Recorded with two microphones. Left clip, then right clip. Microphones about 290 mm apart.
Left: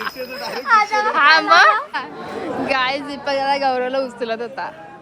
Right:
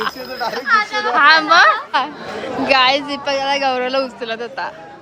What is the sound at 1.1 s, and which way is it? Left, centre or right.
A woman's voice, centre.